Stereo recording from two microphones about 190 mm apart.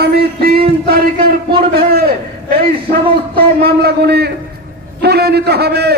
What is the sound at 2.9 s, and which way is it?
A man's voice, 55° right (ahead or behind).